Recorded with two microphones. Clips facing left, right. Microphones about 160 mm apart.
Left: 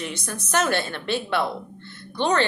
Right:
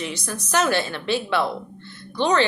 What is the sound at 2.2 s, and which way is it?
Speech, 55° left (ahead or behind).